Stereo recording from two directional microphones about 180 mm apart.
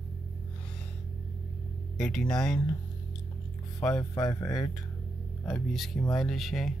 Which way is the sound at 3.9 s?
20° left (ahead or behind).